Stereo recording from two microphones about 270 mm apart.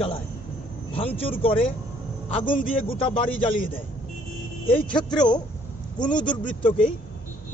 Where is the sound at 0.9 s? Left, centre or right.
Left.